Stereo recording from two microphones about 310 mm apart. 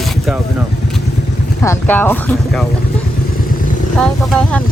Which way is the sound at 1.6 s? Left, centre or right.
Centre.